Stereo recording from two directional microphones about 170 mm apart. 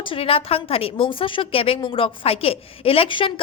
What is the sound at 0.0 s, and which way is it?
A woman's voice, 30° left (ahead or behind).